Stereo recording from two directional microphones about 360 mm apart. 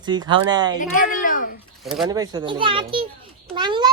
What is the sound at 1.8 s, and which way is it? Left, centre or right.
Speech, centre.